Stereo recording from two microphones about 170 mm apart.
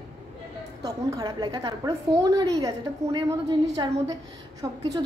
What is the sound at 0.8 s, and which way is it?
A woman's voice, 20° right (ahead or behind).